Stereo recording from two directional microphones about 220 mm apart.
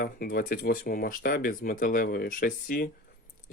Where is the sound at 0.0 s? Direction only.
40° left (ahead or behind).